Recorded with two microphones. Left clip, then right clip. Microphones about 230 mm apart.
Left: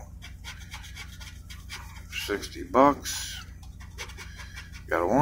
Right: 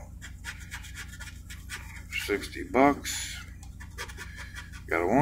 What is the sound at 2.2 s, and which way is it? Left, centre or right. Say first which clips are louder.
Speech: even; centre.